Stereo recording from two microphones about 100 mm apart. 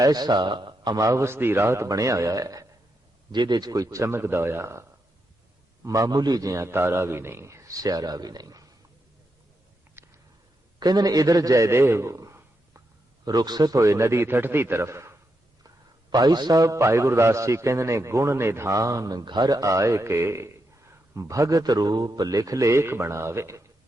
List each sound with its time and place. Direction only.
0.0 s a man's voice: 40° right (ahead or behind)
1.0 s a man's voice: 30° right (ahead or behind)
3.3 s a man's voice: 45° right (ahead or behind)
10.0 s a sound: 25° right (ahead or behind)
10.8 s a man's voice: 40° right (ahead or behind)
13.2 s a man's voice: 40° right (ahead or behind)
15.6 s a man's voice: 40° right (ahead or behind)